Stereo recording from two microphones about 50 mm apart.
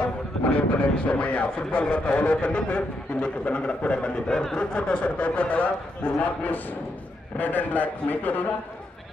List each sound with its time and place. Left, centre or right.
0.5 s a man's voice: left